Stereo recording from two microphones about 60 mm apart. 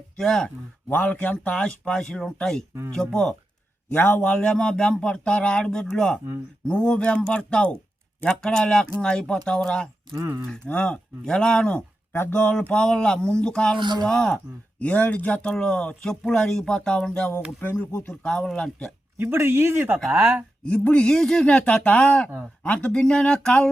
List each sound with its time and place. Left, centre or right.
0.2 s speech: centre
0.9 s speech: left; by 3.3 s centre
3.9 s a man's voice: left
4.2 s speech: centre
10.2 s speech: right
10.5 s speech: centre
12.3 s speech: left
12.6 s speech: centre
14.3 s speech: left
15.4 s speech: centre
19.1 s speech: right
20.9 s speech: centre